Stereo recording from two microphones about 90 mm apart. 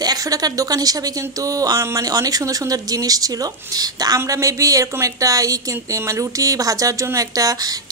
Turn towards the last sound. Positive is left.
turn(degrees=-40)  # may be behind; listen again after turning